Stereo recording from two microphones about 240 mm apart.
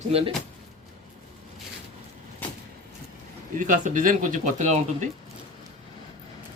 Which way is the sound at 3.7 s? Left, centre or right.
Right.